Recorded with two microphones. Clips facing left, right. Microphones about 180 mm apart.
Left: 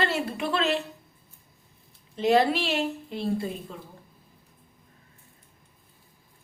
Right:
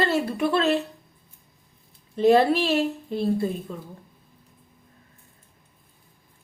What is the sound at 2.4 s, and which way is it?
A woman's voice, 40° right (ahead or behind).